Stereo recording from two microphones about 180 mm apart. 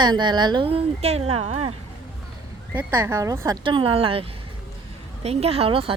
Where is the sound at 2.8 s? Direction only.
15° right (ahead or behind).